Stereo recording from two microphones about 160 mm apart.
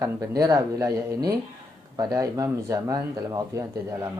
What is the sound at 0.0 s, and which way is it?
A man's voice, 20° right (ahead or behind).